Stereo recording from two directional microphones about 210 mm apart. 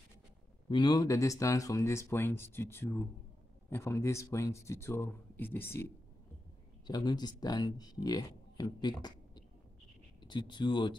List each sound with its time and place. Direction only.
0.7 s speech: 20° left (ahead or behind)